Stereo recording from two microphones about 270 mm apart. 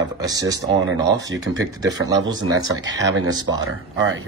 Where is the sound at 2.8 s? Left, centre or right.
Right.